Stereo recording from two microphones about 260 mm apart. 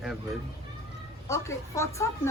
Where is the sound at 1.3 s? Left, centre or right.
Centre.